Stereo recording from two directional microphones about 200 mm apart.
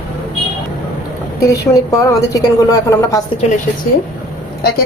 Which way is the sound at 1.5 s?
15° left (ahead or behind).